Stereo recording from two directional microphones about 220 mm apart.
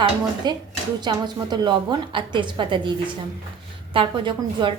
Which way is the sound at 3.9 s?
25° right (ahead or behind).